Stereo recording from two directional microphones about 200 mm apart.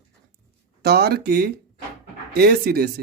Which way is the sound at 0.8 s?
55° right (ahead or behind).